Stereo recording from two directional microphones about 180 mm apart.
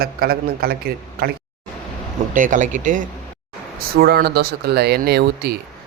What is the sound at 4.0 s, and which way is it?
A man's voice, 60° right (ahead or behind).